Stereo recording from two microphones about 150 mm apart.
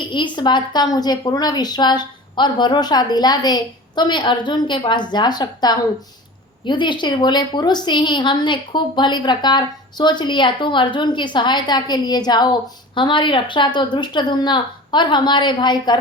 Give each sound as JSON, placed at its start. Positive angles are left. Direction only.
{"t": 0.0, "sound": "a woman's voice", "side_deg": 30}